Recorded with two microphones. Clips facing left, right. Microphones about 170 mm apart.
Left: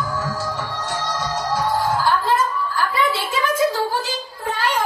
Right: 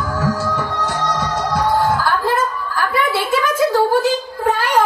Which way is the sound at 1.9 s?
65° right (ahead or behind).